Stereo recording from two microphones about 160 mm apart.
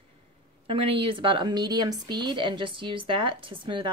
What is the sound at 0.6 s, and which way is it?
Speech, 35° right (ahead or behind).